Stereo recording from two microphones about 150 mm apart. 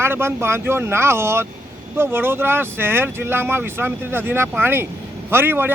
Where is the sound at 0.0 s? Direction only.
15° right (ahead or behind).